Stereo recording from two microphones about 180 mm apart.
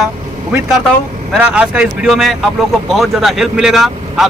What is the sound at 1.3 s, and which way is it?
Speech, 5° right (ahead or behind).